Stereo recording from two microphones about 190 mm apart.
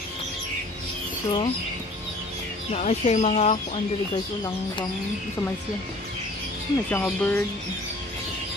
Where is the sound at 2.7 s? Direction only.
35° left (ahead or behind).